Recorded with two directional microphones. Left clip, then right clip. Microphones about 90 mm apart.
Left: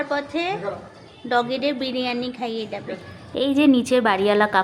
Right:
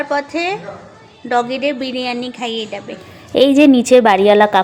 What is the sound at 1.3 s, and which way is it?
A woman's voice, 80° right.